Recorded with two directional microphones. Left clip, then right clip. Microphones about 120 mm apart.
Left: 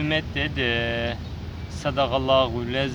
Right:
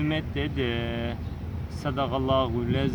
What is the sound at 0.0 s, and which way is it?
Speech, 25° left (ahead or behind).